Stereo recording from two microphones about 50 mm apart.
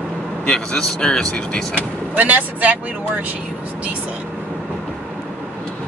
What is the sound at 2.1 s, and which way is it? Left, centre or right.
Speech, right.